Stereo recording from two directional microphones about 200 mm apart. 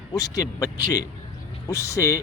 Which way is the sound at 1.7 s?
15° left (ahead or behind).